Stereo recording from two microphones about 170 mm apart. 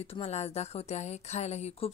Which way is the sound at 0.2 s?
40° left (ahead or behind).